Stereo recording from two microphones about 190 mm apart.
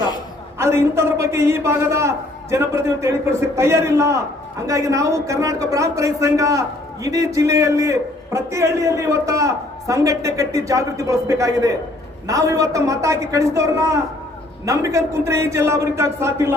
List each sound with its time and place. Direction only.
0.6 s a man's voice: 15° right (ahead or behind)